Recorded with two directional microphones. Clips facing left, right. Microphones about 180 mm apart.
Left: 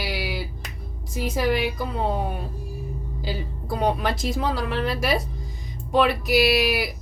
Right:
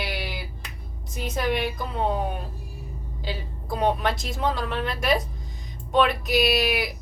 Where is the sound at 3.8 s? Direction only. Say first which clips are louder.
Even; centre (ahead or behind).